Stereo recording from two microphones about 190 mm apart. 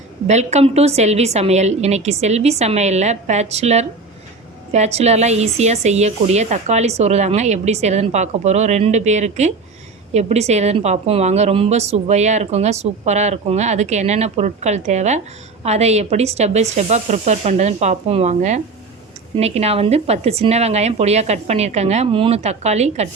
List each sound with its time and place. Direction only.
0.3 s a woman's voice: 35° right (ahead or behind)